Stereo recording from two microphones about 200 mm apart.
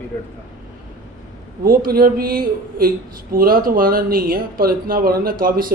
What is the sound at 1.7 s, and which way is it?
Speech, 45° right (ahead or behind).